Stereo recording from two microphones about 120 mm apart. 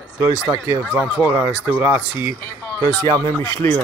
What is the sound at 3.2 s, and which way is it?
Speech, 15° left (ahead or behind).